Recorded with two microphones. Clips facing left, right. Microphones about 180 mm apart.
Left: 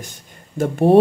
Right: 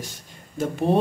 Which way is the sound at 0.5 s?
50° left (ahead or behind).